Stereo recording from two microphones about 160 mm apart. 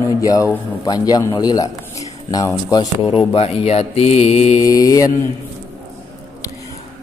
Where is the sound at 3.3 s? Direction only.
40° left (ahead or behind).